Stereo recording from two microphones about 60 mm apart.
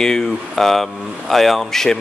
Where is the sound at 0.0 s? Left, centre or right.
Centre.